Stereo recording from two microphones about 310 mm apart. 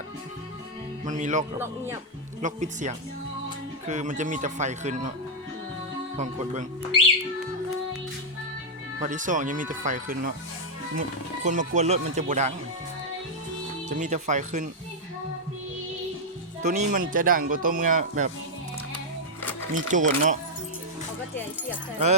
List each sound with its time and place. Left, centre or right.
1.0 s speech: right
1.5 s speech: centre
2.4 s speech: right
6.1 s speech: right
9.0 s speech: right
11.4 s speech: right
13.8 s speech: right
16.6 s speech: right
19.7 s speech: right